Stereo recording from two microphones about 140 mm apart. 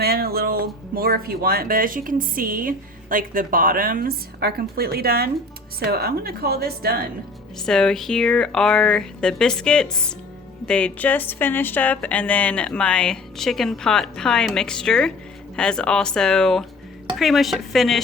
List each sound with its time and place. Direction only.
0.0 s speech: 90° right
7.6 s speech: 5° left (ahead or behind)